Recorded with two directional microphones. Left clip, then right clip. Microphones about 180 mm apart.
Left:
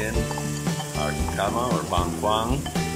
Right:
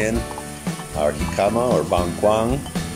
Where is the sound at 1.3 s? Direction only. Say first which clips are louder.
Right 6 dB; 25° right (ahead or behind).